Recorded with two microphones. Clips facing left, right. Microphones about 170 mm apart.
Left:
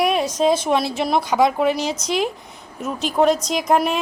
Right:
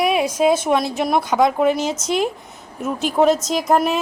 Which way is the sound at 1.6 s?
50° right (ahead or behind).